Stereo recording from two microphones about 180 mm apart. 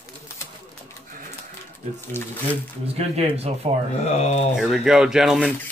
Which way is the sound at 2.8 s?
35° right (ahead or behind).